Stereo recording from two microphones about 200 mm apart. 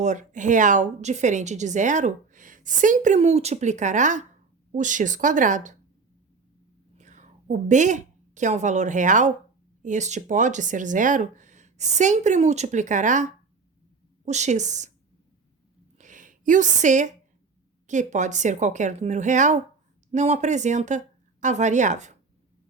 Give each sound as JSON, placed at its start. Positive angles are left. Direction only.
{"t": 0.0, "sound": "a woman's voice", "side_deg": -35}
{"t": 6.9, "sound": "a woman's voice", "side_deg": -35}
{"t": 14.3, "sound": "a woman's voice", "side_deg": -35}
{"t": 16.0, "sound": "a sound", "side_deg": -40}
{"t": 17.8, "sound": "a woman's voice", "side_deg": -35}